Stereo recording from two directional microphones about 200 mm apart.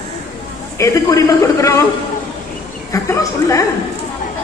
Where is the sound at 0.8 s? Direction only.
15° left (ahead or behind).